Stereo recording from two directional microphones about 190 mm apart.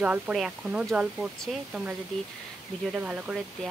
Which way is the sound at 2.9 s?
5° right (ahead or behind).